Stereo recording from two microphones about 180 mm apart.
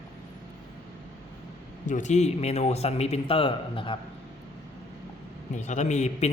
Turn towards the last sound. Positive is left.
turn(degrees=40)  # may be behind; listen again after turning